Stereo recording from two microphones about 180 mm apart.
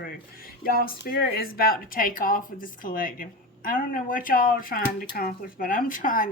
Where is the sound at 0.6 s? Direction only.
55° left (ahead or behind).